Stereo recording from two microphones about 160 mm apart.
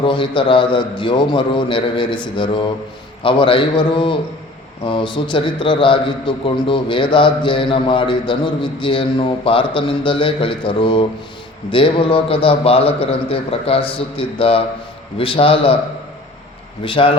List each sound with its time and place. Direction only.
0.0 s a man's voice: 30° left (ahead or behind)
16.8 s a man's voice: 35° left (ahead or behind)